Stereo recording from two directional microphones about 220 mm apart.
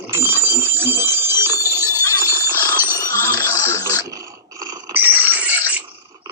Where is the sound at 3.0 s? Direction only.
15° left (ahead or behind).